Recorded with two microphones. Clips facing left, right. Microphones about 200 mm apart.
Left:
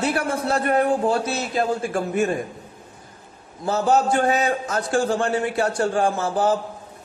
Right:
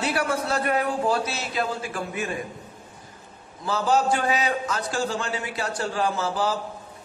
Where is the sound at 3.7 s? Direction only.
50° left (ahead or behind).